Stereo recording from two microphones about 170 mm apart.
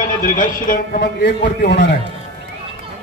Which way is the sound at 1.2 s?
85° left.